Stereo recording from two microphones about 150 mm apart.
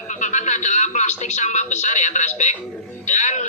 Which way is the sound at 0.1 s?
55° left (ahead or behind).